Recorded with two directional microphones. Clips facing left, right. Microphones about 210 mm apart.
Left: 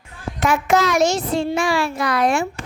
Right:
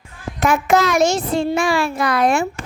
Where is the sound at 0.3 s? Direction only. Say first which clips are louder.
Right 2 dB; 50° right (ahead or behind).